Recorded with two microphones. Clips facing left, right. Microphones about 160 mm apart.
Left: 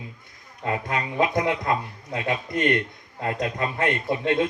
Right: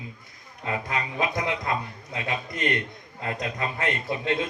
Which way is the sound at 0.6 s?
55° left (ahead or behind).